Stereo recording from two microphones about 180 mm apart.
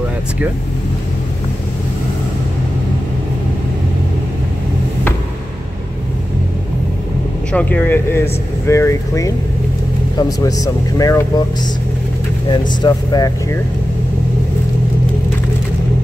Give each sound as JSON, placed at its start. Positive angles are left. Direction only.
{"t": 7.5, "sound": "speech", "side_deg": 10}
{"t": 12.4, "sound": "speech", "side_deg": 25}